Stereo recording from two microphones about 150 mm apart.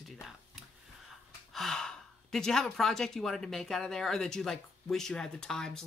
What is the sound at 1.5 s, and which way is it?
Speech, 5° left (ahead or behind).